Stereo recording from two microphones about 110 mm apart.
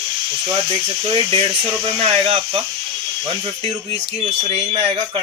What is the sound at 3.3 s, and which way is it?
Speech, 50° right (ahead or behind).